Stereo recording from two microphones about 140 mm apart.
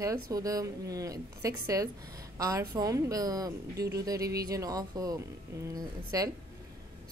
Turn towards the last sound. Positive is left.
turn(degrees=-25)  # may be behind; listen again after turning